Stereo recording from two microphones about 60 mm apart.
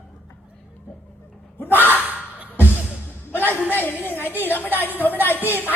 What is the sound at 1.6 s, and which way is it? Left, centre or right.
Speech, left.